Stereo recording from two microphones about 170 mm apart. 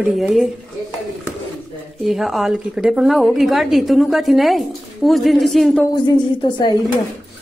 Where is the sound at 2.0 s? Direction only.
Centre (ahead or behind).